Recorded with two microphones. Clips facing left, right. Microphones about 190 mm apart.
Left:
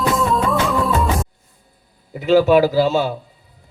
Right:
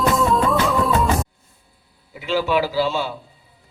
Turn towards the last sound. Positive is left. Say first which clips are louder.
# left 5 dB
turn(degrees=45)  # may be behind; listen again after turning